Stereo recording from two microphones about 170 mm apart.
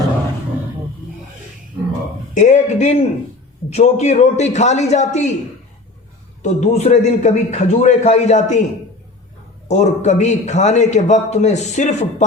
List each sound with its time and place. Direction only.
2.3 s a man's voice: 45° left (ahead or behind)
6.4 s a man's voice: 40° left (ahead or behind)
9.6 s a man's voice: 45° left (ahead or behind)